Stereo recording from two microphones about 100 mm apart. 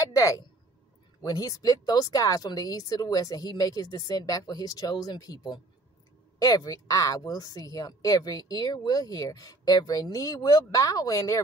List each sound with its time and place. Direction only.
0.0 s speech: 30° left (ahead or behind)